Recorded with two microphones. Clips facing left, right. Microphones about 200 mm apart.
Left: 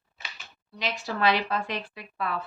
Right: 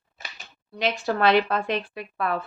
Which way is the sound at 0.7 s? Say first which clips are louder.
Right 6 dB; 50° right (ahead or behind).